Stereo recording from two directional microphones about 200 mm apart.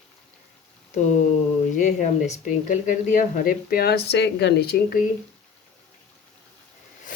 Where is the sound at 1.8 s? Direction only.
40° left (ahead or behind).